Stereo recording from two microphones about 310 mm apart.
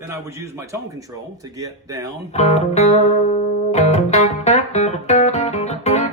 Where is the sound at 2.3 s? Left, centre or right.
Left.